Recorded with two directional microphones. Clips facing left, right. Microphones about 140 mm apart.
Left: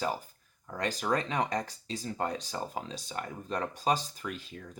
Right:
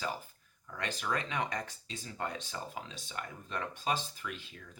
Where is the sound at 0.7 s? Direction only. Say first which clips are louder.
Left 5 dB; 40° left (ahead or behind).